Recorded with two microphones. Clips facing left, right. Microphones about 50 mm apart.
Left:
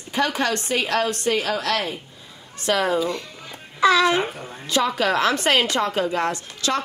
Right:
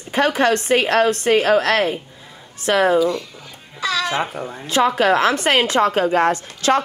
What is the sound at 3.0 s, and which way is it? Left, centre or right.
A child's voice, left.